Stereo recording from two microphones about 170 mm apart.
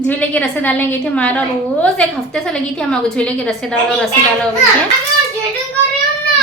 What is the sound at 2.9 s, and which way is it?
Speech, 5° left (ahead or behind).